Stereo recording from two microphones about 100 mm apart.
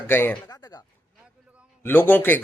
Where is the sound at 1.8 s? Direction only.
20° left (ahead or behind).